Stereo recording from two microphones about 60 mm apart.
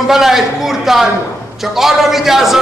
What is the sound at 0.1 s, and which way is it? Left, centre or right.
A man's voice, centre.